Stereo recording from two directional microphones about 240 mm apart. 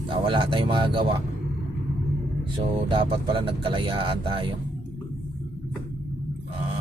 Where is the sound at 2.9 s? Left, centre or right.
Right.